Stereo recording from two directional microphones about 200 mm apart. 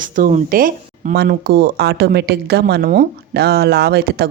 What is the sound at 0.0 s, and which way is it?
A woman's voice, 40° right (ahead or behind).